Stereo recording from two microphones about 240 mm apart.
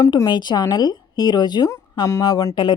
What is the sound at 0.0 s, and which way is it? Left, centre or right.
A woman's voice, centre.